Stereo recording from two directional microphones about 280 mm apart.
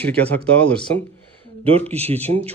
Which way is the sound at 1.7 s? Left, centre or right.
Right.